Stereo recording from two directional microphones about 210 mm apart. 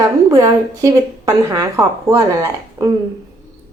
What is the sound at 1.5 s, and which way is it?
Speech, 15° right (ahead or behind).